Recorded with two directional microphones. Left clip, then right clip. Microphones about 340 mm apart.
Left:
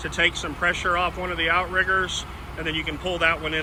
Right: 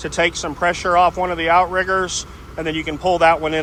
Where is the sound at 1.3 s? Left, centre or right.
Right.